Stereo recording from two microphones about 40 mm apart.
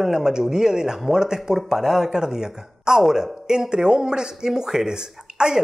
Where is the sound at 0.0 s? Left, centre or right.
Centre.